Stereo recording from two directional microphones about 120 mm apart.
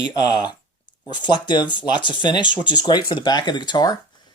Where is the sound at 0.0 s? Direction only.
35° left (ahead or behind).